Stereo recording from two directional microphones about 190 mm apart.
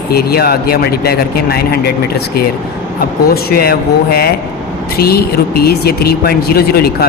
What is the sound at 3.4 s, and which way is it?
Speech, 55° left (ahead or behind).